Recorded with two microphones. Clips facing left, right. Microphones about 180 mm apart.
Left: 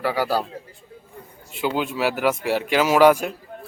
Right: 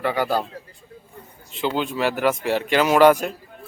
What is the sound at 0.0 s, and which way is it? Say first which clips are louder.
Speech: even; 5° left (ahead or behind).